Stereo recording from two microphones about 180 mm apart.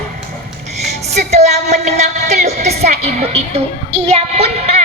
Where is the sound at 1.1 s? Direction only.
35° right (ahead or behind).